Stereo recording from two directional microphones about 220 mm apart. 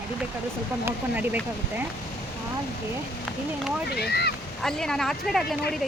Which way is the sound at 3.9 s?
45° left (ahead or behind).